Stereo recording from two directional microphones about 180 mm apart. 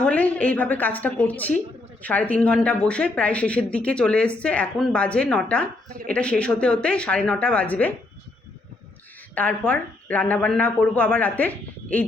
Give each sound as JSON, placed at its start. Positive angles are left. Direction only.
{"t": 0.0, "sound": "speech", "side_deg": 10}
{"t": 9.3, "sound": "speech", "side_deg": 10}